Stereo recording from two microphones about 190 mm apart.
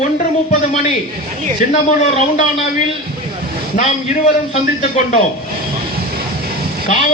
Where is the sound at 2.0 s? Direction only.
35° left (ahead or behind).